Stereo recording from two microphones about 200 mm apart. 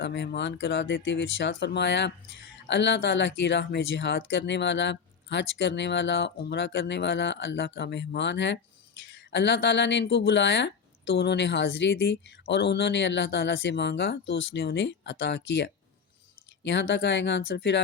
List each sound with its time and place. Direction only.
0.0 s speech: 60° left (ahead or behind)